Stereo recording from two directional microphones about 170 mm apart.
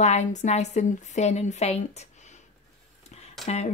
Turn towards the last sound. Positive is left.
turn(degrees=40)  # may be behind; listen again after turning